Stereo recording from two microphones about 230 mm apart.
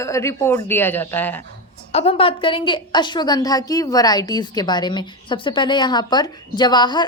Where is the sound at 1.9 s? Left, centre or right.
Left.